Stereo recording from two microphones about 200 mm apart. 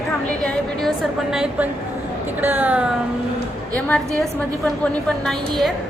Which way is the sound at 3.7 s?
5° left (ahead or behind).